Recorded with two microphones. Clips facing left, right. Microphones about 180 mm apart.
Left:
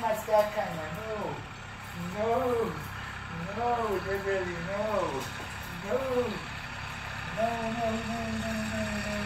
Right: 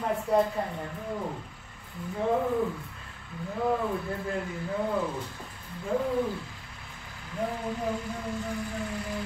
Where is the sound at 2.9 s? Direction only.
70° left (ahead or behind).